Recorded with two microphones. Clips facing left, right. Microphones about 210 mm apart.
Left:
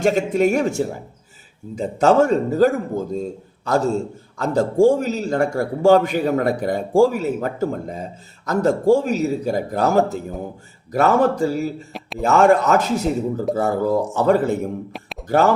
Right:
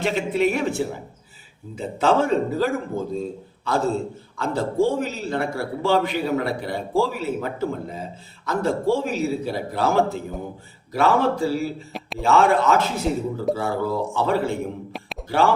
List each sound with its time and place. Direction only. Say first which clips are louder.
0.0 s a man's voice: left 4 dB; 45° left (ahead or behind)
11.9 s a man's voice: left 1 dB; centre (ahead or behind)
12.2 s a man's voice: left 3 dB; 45° left (ahead or behind)